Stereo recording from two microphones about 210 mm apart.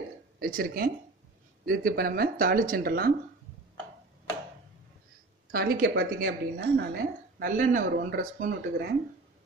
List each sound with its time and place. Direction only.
0.4 s speech: 45° right (ahead or behind)
5.5 s speech: 45° right (ahead or behind)